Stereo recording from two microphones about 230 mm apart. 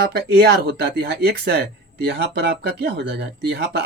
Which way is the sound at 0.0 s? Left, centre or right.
Right.